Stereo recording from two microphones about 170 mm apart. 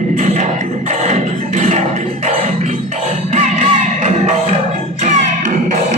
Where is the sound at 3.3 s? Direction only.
45° right (ahead or behind).